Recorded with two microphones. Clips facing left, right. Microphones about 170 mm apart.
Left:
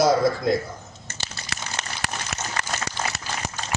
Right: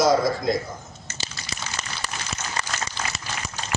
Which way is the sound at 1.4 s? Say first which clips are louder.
Left 2 dB; 70° left (ahead or behind).